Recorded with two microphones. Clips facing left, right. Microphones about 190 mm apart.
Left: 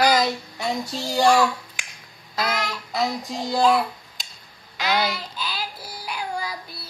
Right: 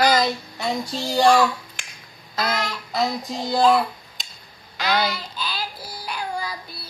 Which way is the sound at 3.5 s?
10° left (ahead or behind).